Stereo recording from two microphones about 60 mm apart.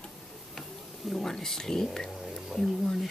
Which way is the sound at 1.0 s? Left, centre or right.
Centre.